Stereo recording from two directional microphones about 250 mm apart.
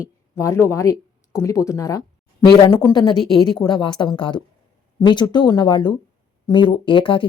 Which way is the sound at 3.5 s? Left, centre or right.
Centre.